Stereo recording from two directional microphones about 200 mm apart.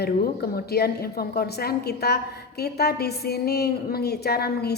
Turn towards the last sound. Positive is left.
turn(degrees=50)  # may be behind; listen again after turning